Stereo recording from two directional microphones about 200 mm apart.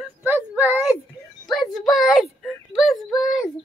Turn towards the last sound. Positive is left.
turn(degrees=0)  # may be behind; listen again after turning